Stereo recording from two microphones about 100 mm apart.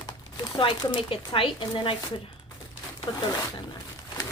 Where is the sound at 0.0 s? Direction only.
50° left (ahead or behind).